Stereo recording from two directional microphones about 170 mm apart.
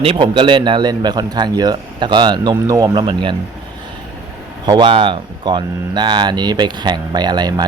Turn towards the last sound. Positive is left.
turn(degrees=-25)  # may be behind; listen again after turning